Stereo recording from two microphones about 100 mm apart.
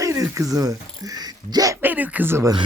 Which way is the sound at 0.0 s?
30° right (ahead or behind).